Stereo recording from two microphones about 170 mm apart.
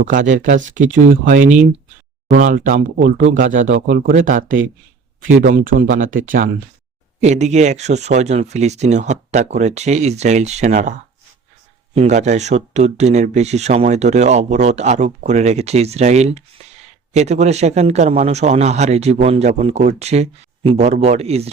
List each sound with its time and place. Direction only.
0.1 s speech: 50° right (ahead or behind)
11.9 s speech: 45° right (ahead or behind)